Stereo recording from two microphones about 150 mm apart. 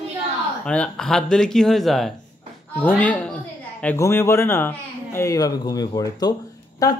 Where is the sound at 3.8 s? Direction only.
15° left (ahead or behind).